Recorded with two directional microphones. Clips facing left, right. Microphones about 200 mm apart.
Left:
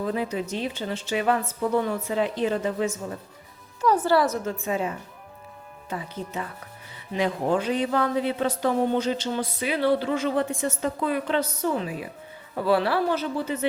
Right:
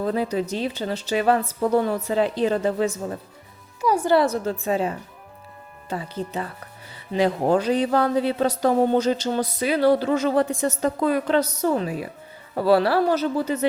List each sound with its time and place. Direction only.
0.0 s speech: 35° right (ahead or behind)
3.8 s a woman's voice: 10° right (ahead or behind)
4.1 s a woman's voice: 25° right (ahead or behind)
7.1 s speech: 35° right (ahead or behind)